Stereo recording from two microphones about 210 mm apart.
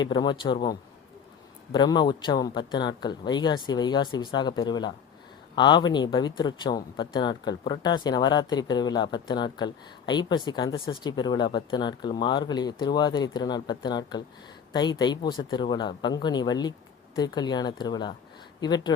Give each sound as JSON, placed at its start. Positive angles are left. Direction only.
{"t": 0.0, "sound": "speech", "side_deg": 20}